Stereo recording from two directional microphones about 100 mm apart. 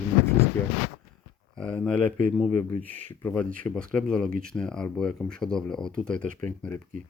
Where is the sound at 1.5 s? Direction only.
10° left (ahead or behind).